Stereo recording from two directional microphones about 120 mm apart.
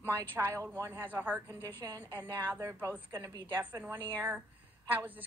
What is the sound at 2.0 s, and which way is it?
A woman's voice, 15° right (ahead or behind).